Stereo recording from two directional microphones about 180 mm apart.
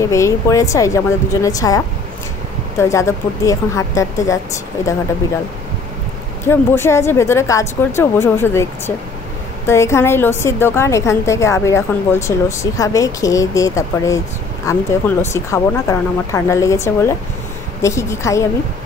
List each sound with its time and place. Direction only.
0.1 s a woman's voice: 15° left (ahead or behind)
2.8 s a woman's voice: 15° left (ahead or behind)
6.4 s a woman's voice: 15° left (ahead or behind)